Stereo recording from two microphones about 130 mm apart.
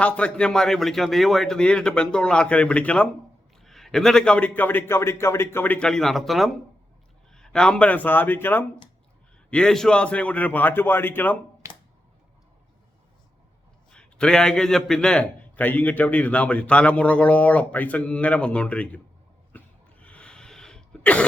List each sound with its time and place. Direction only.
0.0 s a man's voice: 10° left (ahead or behind)
11.6 s a sound: 25° right (ahead or behind)
13.9 s a man's voice: 5° left (ahead or behind)
19.5 s cough: 10° left (ahead or behind)